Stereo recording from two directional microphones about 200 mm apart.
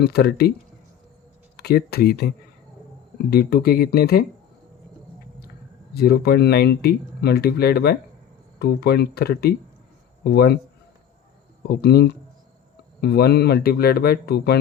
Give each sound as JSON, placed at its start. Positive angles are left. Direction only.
{"t": 0.0, "sound": "speech", "side_deg": 55}
{"t": 1.5, "sound": "speech", "side_deg": 50}
{"t": 5.9, "sound": "speech", "side_deg": 50}
{"t": 11.7, "sound": "speech", "side_deg": 55}